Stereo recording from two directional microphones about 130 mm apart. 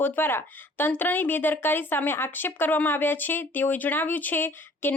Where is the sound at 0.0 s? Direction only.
15° left (ahead or behind).